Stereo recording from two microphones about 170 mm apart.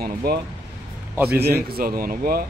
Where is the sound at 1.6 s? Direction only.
60° right (ahead or behind).